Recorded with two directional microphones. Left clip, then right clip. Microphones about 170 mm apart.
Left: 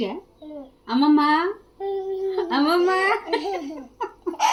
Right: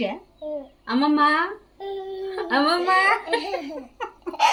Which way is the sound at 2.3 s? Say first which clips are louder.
Right 1 dB; 35° right (ahead or behind).